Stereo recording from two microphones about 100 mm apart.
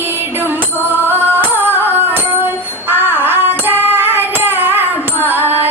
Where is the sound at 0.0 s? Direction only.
20° right (ahead or behind).